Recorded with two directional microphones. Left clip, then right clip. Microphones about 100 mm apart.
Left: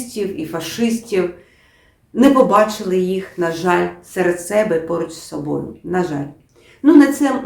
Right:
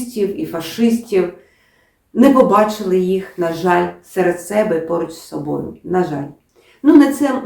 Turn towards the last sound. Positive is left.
turn(degrees=20)  # may be behind; listen again after turning